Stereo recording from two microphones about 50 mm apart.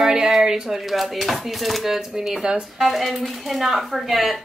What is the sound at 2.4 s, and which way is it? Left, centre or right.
Speech, centre.